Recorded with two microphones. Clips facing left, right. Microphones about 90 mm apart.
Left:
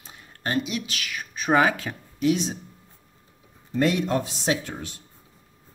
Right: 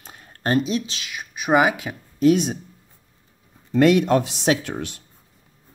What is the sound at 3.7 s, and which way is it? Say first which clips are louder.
Speech: right 7 dB; 75° right (ahead or behind).